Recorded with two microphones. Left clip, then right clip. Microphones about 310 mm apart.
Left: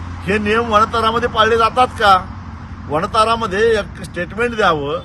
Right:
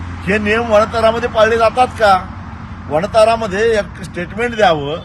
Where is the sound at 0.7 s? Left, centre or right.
Centre.